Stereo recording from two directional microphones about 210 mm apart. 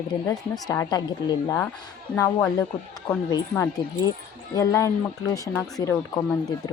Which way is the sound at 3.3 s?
15° left (ahead or behind).